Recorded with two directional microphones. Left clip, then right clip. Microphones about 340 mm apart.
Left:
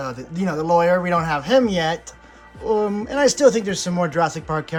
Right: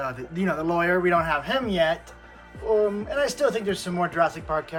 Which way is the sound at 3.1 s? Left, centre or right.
Left.